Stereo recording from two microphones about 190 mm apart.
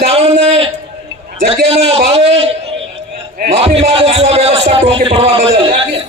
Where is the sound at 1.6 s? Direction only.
30° right (ahead or behind).